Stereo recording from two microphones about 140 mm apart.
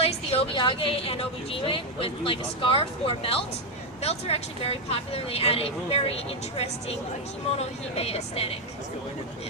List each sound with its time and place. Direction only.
0.0 s a woman's voice: 45° left (ahead or behind)